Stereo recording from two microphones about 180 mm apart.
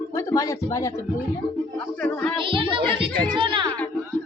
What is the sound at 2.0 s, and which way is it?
Music, 5° left (ahead or behind).